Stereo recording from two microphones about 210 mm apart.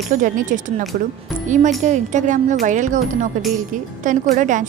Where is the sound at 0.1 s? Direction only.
40° right (ahead or behind).